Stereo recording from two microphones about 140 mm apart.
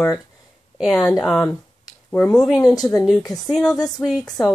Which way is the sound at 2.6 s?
25° left (ahead or behind).